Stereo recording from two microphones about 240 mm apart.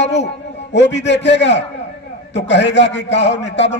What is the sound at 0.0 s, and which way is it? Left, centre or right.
A man's voice, left.